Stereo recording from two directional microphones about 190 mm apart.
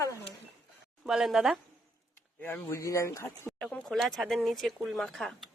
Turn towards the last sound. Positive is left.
turn(degrees=0)  # may be behind; listen again after turning